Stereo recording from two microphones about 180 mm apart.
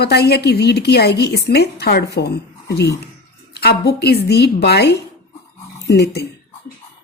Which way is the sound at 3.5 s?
65° left (ahead or behind).